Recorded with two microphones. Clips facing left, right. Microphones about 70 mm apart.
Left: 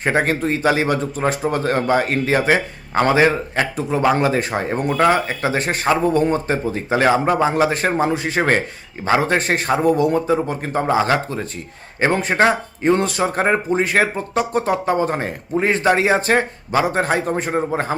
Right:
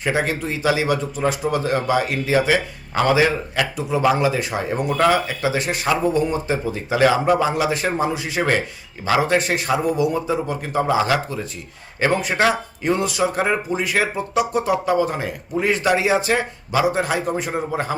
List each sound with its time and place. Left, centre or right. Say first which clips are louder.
0.0 s a man's voice: left 3 dB; left